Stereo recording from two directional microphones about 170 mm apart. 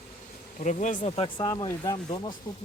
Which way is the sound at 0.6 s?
45° left (ahead or behind).